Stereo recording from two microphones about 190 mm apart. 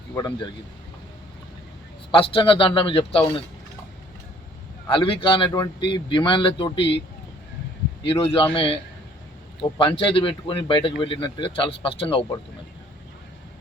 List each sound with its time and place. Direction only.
0.1 s speech: 15° left (ahead or behind)
2.1 s speech: 25° left (ahead or behind)
4.9 s speech: 30° left (ahead or behind)
8.0 s speech: 30° left (ahead or behind)